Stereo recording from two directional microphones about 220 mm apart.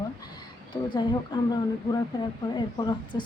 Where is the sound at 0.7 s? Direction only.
20° left (ahead or behind).